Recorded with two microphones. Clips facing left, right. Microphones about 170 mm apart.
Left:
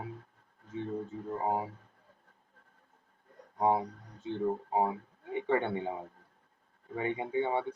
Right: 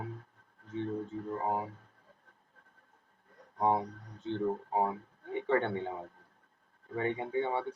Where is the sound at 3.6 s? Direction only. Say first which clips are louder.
Left 1 dB; 10° left (ahead or behind).